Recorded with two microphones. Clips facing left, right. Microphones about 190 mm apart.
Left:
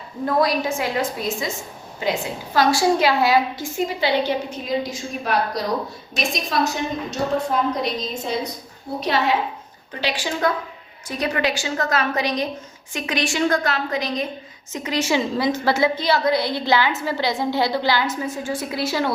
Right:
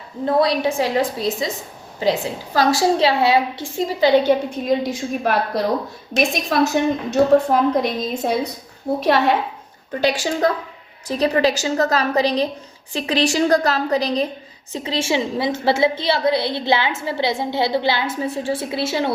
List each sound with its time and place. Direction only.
0.3 s a woman's voice: 30° right (ahead or behind); by 5.3 s 55° right (ahead or behind)
6.5 s a woman's voice: 60° right (ahead or behind)
10.0 s a woman's voice: 45° right (ahead or behind); by 19.1 s 25° right (ahead or behind)